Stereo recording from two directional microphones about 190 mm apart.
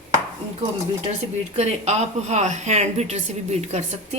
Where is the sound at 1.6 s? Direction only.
35° right (ahead or behind).